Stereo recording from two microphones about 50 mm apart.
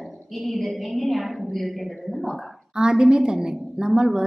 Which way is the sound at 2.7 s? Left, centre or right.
Centre.